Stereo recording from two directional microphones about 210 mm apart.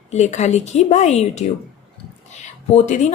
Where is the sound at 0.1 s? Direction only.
35° left (ahead or behind).